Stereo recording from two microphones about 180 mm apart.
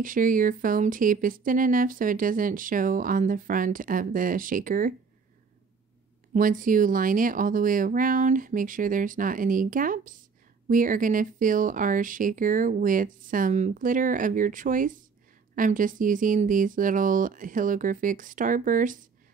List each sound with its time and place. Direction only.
0.0 s speech: 50° right (ahead or behind)
6.3 s speech: 45° right (ahead or behind)